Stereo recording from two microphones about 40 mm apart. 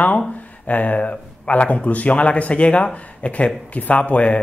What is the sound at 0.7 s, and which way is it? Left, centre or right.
Speech, left.